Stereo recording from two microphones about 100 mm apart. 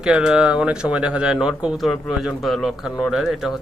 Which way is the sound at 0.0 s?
5° right (ahead or behind).